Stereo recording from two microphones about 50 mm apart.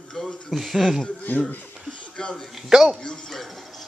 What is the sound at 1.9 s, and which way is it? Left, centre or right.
Speech, centre.